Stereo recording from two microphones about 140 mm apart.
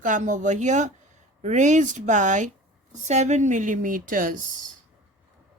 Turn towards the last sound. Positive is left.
turn(degrees=-75)  # may be behind; listen again after turning